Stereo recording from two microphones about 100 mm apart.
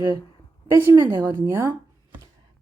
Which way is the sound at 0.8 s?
25° right (ahead or behind).